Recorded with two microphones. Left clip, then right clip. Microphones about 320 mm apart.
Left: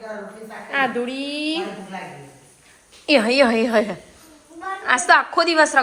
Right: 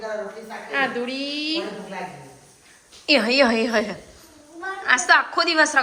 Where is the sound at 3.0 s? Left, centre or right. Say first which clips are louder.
Left 2 dB; centre.